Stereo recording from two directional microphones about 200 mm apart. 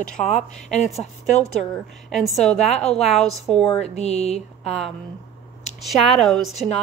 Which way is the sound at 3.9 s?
30° left (ahead or behind).